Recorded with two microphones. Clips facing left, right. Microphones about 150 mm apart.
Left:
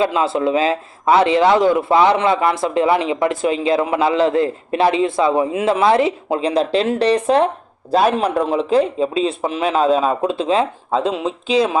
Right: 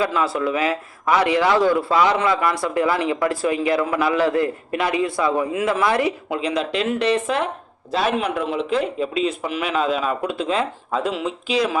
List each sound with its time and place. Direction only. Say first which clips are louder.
0.0 s a man's voice: left 4 dB; 25° left (ahead or behind)